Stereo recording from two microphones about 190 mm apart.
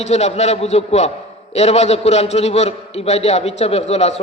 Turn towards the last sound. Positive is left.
turn(degrees=35)  # may be behind; listen again after turning